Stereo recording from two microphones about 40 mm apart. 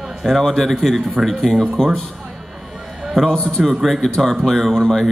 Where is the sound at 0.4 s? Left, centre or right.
Centre.